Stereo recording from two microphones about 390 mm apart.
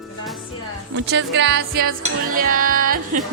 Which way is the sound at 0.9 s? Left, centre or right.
Right.